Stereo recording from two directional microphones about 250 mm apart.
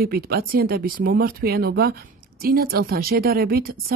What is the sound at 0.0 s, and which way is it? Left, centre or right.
Speech, right.